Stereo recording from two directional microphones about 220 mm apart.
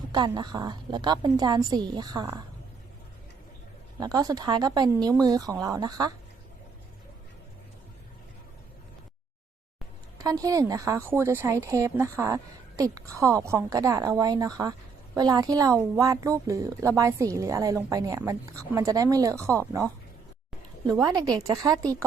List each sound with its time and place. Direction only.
0.1 s a woman's voice: 20° right (ahead or behind)
4.0 s a woman's voice: 15° right (ahead or behind)
10.2 s a woman's voice: 15° right (ahead or behind)